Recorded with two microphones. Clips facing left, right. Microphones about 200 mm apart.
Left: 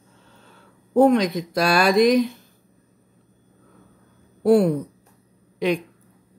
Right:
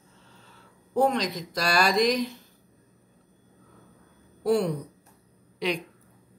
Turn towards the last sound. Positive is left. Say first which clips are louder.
# left 7 dB
turn(degrees=50)  # may be behind; listen again after turning